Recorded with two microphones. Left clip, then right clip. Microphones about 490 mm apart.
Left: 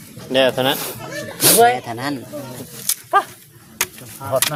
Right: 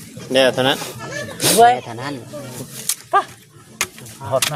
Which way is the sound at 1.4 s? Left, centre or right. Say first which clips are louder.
Right 1 dB; left.